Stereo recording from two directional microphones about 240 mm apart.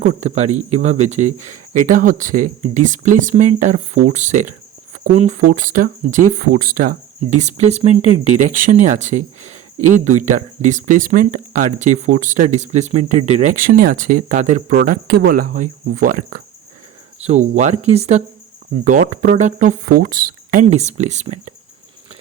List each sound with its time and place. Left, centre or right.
0.0 s speech: right